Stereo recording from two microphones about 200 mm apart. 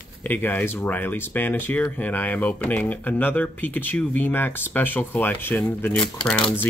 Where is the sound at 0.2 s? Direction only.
10° left (ahead or behind).